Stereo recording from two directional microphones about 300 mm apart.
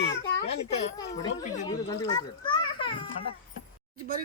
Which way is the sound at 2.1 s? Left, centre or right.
Centre.